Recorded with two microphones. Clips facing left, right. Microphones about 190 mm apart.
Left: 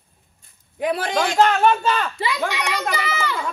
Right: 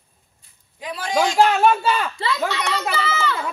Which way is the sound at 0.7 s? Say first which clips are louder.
Left 8 dB; 60° left (ahead or behind).